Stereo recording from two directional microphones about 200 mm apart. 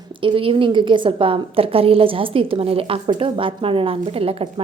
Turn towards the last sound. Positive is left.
turn(degrees=-30)  # may be behind; listen again after turning